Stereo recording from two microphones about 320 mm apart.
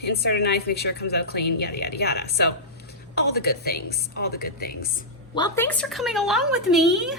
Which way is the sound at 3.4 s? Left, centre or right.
Left.